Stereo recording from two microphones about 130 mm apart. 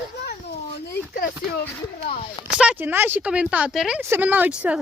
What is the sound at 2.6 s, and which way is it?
Speech, 10° right (ahead or behind).